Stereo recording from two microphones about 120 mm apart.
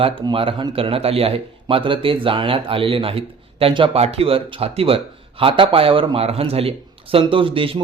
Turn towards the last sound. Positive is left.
turn(degrees=-45)  # may be behind; listen again after turning